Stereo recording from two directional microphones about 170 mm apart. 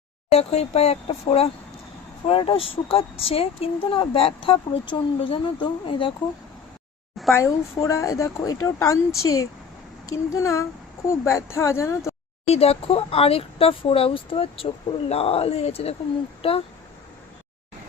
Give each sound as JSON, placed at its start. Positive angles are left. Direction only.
{"t": 0.3, "sound": "speech", "side_deg": 35}
{"t": 7.3, "sound": "a woman's voice", "side_deg": 20}
{"t": 12.5, "sound": "speech", "side_deg": 35}